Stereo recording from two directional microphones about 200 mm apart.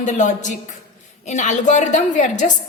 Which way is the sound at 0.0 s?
40° left (ahead or behind).